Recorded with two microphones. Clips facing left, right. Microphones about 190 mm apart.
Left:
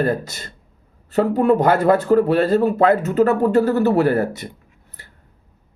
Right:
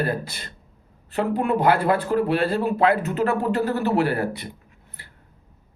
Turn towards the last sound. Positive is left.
turn(degrees=45)  # may be behind; listen again after turning